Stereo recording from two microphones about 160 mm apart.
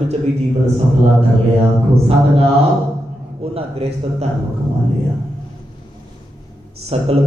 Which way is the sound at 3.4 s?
40° right (ahead or behind).